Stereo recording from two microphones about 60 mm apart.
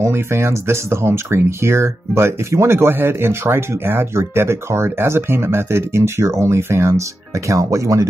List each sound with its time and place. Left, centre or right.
0.0 s speech: right